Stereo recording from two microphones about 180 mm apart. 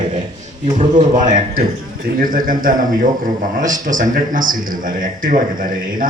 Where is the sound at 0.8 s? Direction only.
45° right (ahead or behind).